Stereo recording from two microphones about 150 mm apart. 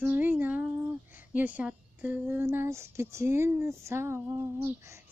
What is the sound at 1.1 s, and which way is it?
Speech, 10° right (ahead or behind).